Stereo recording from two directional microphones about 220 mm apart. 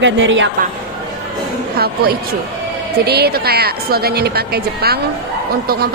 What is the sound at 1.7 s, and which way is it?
A woman's voice, 45° right (ahead or behind).